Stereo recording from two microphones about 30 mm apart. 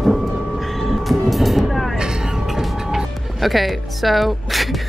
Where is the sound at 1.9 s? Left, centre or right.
Right.